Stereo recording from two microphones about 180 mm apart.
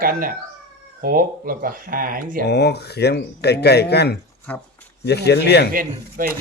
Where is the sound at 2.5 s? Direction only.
65° left (ahead or behind).